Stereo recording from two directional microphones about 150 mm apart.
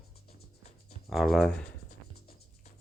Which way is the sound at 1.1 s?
Centre (ahead or behind).